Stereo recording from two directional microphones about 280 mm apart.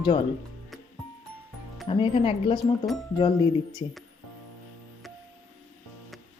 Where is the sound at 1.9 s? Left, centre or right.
Centre.